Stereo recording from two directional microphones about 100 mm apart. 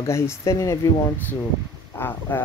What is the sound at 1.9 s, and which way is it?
Speech, 20° left (ahead or behind).